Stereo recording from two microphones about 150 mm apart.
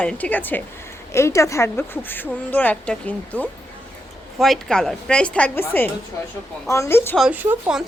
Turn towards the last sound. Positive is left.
turn(degrees=-10)  # may be behind; listen again after turning